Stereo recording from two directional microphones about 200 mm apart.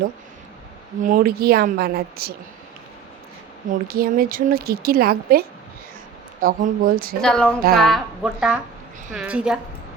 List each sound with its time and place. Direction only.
1.0 s a woman's voice: 45° right (ahead or behind)
3.7 s a woman's voice: 45° right (ahead or behind)
7.2 s a woman's voice: 5° left (ahead or behind)